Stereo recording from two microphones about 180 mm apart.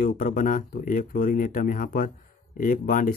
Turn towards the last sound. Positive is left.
turn(degrees=50)  # may be behind; listen again after turning